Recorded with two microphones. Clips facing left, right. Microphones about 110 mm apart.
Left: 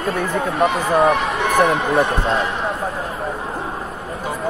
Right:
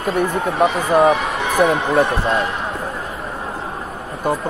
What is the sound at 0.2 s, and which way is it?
Speech, 15° right (ahead or behind).